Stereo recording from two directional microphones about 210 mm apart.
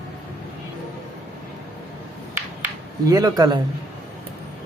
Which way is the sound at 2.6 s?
15° right (ahead or behind).